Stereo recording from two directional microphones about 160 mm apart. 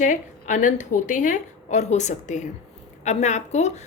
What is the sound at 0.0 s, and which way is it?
A woman's voice, 50° left (ahead or behind).